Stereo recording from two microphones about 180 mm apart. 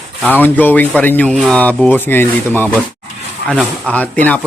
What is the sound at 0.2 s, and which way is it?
Speech, 10° left (ahead or behind).